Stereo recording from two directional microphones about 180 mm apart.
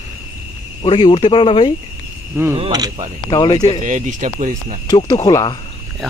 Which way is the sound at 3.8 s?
45° right (ahead or behind).